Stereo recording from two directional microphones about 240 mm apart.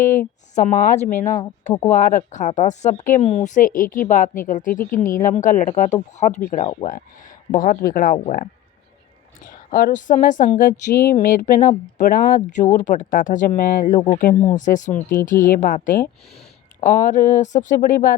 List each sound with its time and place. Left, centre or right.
0.5 s speech: left
9.5 s speech: left